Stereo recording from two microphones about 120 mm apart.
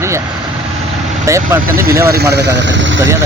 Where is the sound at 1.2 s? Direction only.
25° right (ahead or behind).